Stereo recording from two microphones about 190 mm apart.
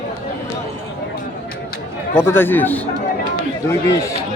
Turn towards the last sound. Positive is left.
turn(degrees=15)  # may be behind; listen again after turning